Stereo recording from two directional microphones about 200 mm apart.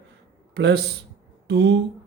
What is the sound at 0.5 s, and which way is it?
A man's voice, 60° right (ahead or behind).